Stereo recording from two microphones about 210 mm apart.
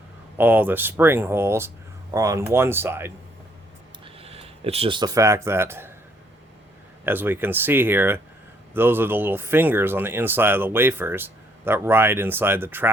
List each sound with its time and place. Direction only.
0.3 s speech: 10° right (ahead or behind)
4.0 s speech: 30° right (ahead or behind); by 5.9 s 10° right (ahead or behind)
7.0 s speech: 10° right (ahead or behind)